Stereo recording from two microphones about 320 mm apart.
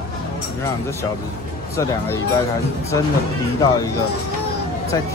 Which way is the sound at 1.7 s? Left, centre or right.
Centre.